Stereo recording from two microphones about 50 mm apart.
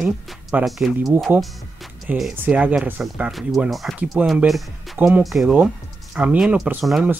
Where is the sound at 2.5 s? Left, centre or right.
Centre.